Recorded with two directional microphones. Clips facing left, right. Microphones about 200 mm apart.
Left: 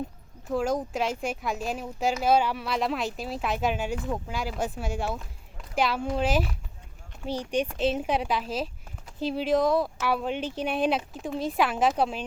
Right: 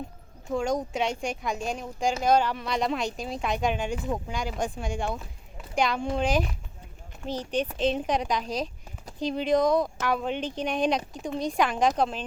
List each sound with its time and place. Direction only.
0.4 s speech: 5° left (ahead or behind)